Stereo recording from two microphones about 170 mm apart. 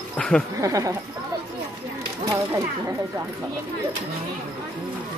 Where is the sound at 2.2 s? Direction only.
15° right (ahead or behind).